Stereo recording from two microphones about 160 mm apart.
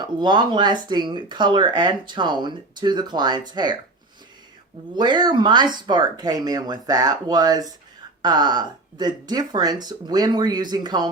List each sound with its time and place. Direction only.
0.0 s speech: 30° right (ahead or behind)
4.9 s speech: 25° right (ahead or behind)